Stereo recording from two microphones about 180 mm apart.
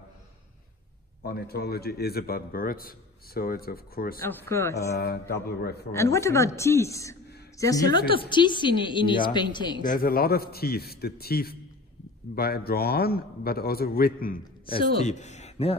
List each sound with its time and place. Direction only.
1.2 s a man's voice: 60° left (ahead or behind)
4.2 s speech: 15° left (ahead or behind)
4.9 s a man's voice: 60° left (ahead or behind)
5.9 s speech: 15° left (ahead or behind)
9.8 s a man's voice: 55° left (ahead or behind)
14.7 s speech: 35° left (ahead or behind)